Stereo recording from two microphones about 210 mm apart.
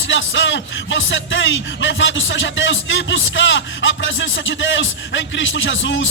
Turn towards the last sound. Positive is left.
turn(degrees=60)  # may be behind; listen again after turning